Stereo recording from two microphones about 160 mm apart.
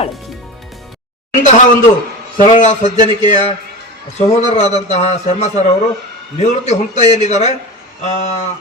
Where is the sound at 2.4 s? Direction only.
50° left (ahead or behind).